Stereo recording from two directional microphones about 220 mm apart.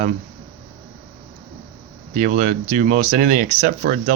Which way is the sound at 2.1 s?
35° right (ahead or behind).